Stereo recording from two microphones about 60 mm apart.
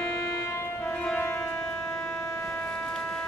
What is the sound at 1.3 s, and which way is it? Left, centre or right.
Music, left.